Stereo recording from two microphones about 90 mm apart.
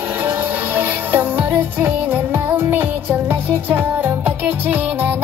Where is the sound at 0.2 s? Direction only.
20° right (ahead or behind).